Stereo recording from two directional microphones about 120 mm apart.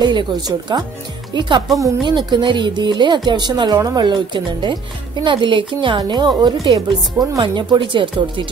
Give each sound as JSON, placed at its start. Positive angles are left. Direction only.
{"t": 0.0, "sound": "speech", "side_deg": -40}